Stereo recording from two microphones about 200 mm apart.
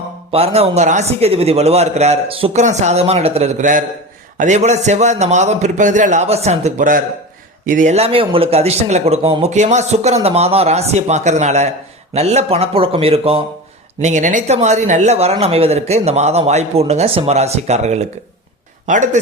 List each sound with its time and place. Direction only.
0.3 s speech: 30° right (ahead or behind)